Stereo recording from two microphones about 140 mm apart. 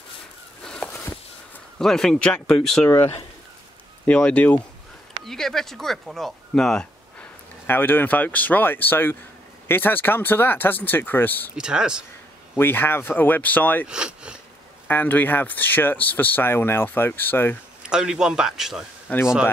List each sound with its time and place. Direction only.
0.8 s a sound: 15° left (ahead or behind)
1.8 s speech: 5° left (ahead or behind)
2.9 s speech: 20° left (ahead or behind)
4.0 s speech: 10° left (ahead or behind)
11.5 s speech: 5° right (ahead or behind)
12.5 s speech: 15° left (ahead or behind)
13.8 s speech: 5° right (ahead or behind)
14.9 s speech: 15° left (ahead or behind)
17.8 s speech: 5° right (ahead or behind)
19.1 s speech: 10° left (ahead or behind)